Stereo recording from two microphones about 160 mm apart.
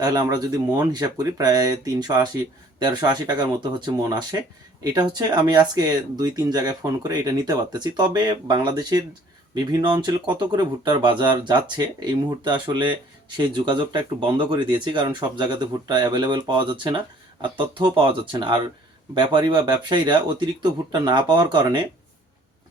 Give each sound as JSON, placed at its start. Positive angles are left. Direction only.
{"t": 0.0, "sound": "speech", "side_deg": -25}